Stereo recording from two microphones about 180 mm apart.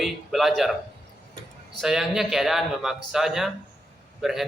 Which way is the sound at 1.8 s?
Centre (ahead or behind).